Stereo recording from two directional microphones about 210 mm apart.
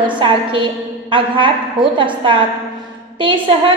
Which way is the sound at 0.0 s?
25° right (ahead or behind).